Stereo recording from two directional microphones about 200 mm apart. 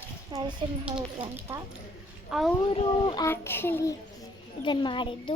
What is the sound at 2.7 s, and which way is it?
Speech, 25° left (ahead or behind).